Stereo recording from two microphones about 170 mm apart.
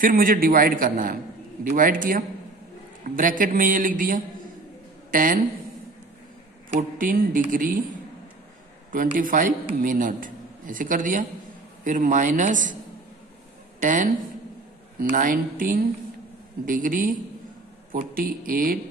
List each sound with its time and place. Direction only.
0.0 s a man's voice: 55° right (ahead or behind)
7.0 s a man's voice: 55° right (ahead or behind)
8.9 s a man's voice: 55° right (ahead or behind)
13.7 s a man's voice: 50° right (ahead or behind)